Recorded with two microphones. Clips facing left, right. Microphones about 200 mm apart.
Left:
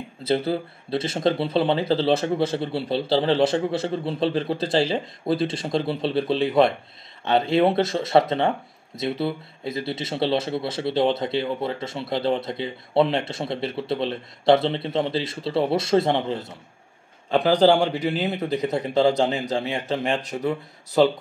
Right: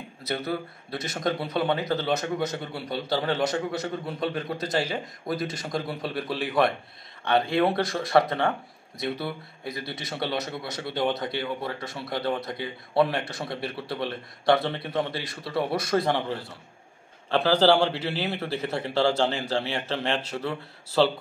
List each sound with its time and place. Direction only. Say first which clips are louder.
0.2 s a man's voice: left 7 dB; 25° left (ahead or behind)